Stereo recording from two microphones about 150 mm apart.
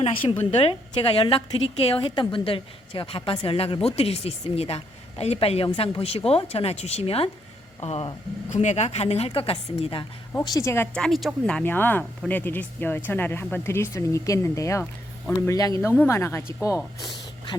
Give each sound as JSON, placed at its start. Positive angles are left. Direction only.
{"t": 0.0, "sound": "a woman's voice", "side_deg": 35}
{"t": 10.4, "sound": "speech", "side_deg": 20}
{"t": 10.9, "sound": "speech", "side_deg": 0}